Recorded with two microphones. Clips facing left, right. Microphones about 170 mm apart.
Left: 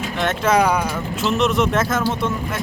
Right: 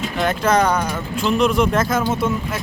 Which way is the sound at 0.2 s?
Centre (ahead or behind).